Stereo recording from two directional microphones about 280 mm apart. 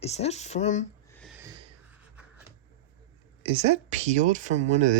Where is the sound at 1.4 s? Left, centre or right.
Centre.